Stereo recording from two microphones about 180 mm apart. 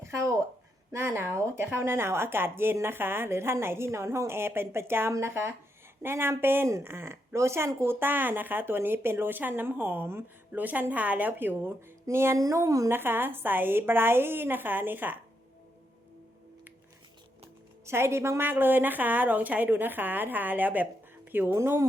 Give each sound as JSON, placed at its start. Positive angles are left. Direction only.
{"t": 0.1, "sound": "a sound", "side_deg": -15}
{"t": 0.9, "sound": "speech", "side_deg": -15}
{"t": 17.8, "sound": "speech", "side_deg": -15}